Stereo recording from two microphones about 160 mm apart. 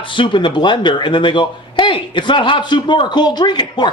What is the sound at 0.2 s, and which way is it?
A man's voice, 30° left (ahead or behind).